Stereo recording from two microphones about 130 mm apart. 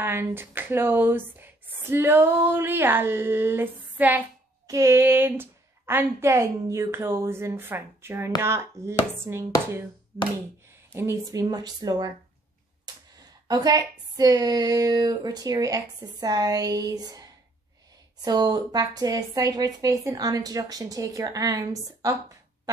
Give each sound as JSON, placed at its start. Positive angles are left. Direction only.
{"t": 0.0, "sound": "speech", "side_deg": -15}
{"t": 10.1, "sound": "a sound", "side_deg": -20}
{"t": 10.9, "sound": "speech", "side_deg": -20}